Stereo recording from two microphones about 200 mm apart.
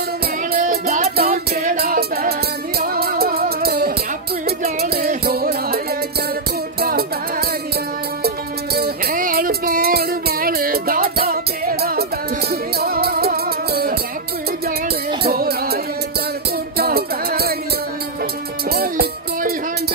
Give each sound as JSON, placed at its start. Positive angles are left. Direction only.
{"t": 0.5, "sound": "music", "side_deg": -40}
{"t": 1.1, "sound": "music", "side_deg": -50}
{"t": 6.8, "sound": "music", "side_deg": -50}
{"t": 8.7, "sound": "music", "side_deg": -50}
{"t": 15.2, "sound": "music", "side_deg": -50}
{"t": 18.7, "sound": "music", "side_deg": -50}